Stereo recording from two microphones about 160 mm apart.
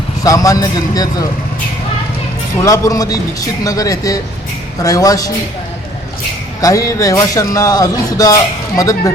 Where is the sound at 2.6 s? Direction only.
20° left (ahead or behind).